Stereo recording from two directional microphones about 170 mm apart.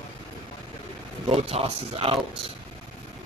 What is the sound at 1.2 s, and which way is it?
Speech, 35° right (ahead or behind).